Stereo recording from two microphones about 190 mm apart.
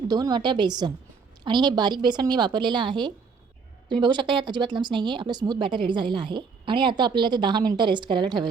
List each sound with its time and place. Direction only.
0.1 s speech: 20° right (ahead or behind)